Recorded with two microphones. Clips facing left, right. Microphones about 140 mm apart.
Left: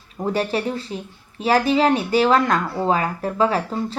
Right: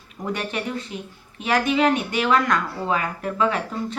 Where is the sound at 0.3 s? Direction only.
35° left (ahead or behind).